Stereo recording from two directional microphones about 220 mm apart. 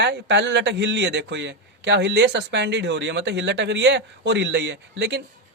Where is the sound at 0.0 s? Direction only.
50° right (ahead or behind).